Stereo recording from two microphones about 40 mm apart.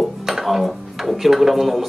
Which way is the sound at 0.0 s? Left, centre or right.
Centre.